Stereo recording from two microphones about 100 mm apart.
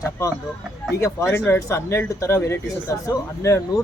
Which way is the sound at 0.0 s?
30° left (ahead or behind).